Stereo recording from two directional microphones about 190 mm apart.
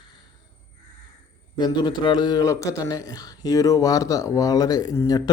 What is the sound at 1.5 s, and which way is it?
A man's voice, 20° left (ahead or behind).